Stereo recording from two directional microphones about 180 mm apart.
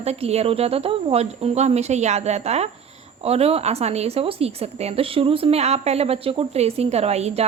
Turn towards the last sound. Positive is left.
turn(degrees=-35)  # may be behind; listen again after turning